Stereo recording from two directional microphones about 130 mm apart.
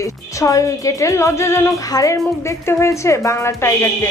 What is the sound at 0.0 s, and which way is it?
Speech, 25° left (ahead or behind).